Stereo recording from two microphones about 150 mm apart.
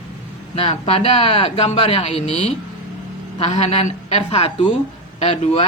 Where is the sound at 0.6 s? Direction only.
40° left (ahead or behind).